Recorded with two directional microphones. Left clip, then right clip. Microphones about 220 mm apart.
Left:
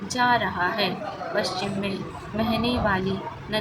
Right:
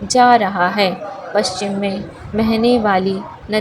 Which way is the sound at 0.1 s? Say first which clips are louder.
Right 11 dB; 35° right (ahead or behind).